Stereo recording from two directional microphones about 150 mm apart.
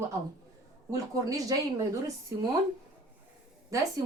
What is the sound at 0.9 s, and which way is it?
A woman's voice, 25° right (ahead or behind).